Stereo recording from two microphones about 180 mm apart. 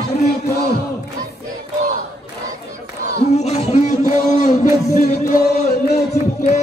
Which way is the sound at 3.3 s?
35° left (ahead or behind).